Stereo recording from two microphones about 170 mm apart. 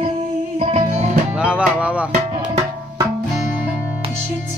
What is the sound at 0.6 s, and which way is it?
Music, 35° right (ahead or behind).